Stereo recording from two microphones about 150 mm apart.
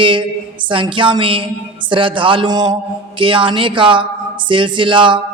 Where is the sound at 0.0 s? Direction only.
35° right (ahead or behind).